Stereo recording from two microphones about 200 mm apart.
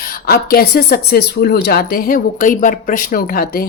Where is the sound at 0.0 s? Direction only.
45° left (ahead or behind).